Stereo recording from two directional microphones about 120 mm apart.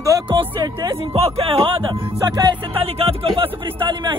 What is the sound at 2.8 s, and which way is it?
Speech, 55° right (ahead or behind).